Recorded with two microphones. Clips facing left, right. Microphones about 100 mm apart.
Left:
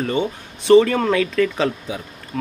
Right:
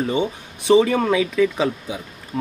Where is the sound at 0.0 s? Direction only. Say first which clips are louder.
Even; 10° right (ahead or behind).